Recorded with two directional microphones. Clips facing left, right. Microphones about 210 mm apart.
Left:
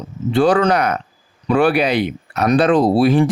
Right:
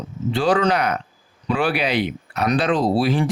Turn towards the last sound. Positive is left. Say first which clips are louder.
# left 6 dB
turn(degrees=50)  # may be behind; listen again after turning